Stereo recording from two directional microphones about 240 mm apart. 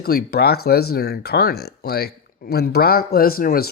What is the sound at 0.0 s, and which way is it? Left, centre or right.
Speech, left.